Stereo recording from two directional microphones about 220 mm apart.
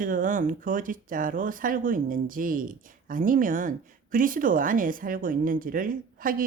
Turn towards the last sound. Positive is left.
turn(degrees=-40)  # may be behind; listen again after turning